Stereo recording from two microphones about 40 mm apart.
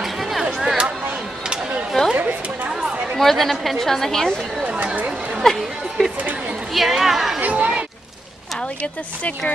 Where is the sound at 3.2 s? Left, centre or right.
Centre.